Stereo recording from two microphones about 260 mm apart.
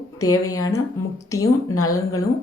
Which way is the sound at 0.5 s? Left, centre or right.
Centre.